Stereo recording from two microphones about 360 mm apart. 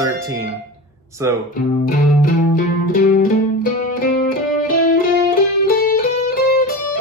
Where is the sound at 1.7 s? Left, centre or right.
Left.